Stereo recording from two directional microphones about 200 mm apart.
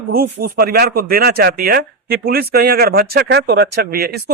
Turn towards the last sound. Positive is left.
turn(degrees=-50)  # may be behind; listen again after turning